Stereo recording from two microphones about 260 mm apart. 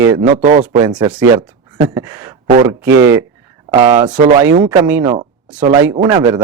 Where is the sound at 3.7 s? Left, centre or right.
Centre.